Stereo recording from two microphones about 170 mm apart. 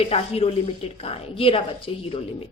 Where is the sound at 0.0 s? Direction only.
35° left (ahead or behind).